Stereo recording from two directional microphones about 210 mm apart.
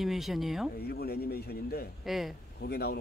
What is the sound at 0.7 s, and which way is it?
Speech, 50° left (ahead or behind).